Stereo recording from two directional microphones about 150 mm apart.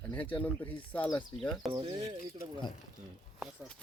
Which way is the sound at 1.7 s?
35° right (ahead or behind).